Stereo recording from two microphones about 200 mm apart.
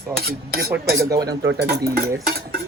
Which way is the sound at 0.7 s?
15° right (ahead or behind).